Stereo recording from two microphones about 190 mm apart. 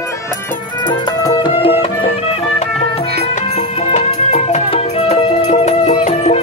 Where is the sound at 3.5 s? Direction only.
35° left (ahead or behind).